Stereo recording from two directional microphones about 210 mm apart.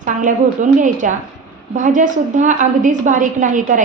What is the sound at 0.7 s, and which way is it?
A woman's voice, 35° right (ahead or behind).